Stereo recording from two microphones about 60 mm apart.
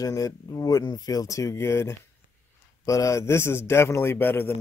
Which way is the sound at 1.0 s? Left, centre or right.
Left.